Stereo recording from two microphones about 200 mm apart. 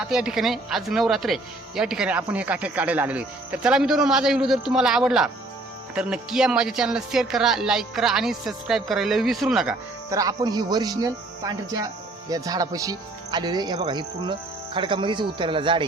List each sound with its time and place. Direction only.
0.1 s speech: 5° right (ahead or behind)
10.1 s speech: 15° right (ahead or behind)